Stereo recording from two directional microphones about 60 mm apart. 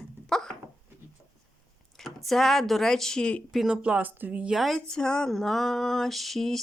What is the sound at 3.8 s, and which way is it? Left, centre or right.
Speech, right.